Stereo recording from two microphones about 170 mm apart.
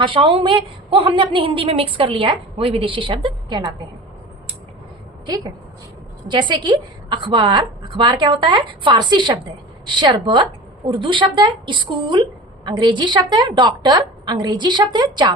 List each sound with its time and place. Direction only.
0.0 s a woman's voice: 30° right (ahead or behind)
5.2 s a woman's voice: 25° right (ahead or behind)